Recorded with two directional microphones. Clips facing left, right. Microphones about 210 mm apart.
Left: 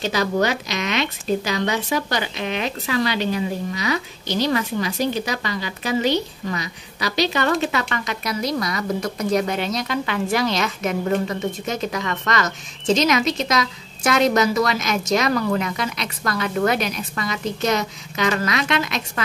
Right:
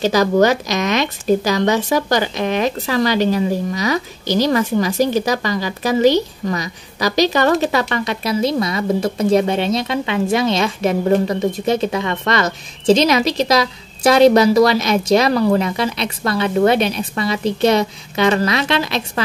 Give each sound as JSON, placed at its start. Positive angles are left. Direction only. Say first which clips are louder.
{"t": 0.0, "sound": "speech", "louder": "right 7 dB", "side_deg": -40}